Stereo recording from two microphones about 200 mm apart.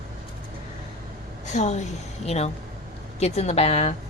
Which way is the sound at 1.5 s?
35° left (ahead or behind).